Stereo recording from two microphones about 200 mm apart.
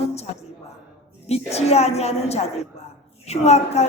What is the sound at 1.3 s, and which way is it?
A woman's voice, 30° left (ahead or behind).